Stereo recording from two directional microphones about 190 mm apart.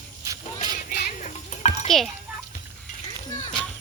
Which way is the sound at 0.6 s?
40° left (ahead or behind).